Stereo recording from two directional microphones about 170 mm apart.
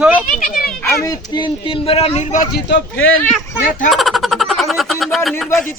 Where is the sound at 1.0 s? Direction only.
25° left (ahead or behind).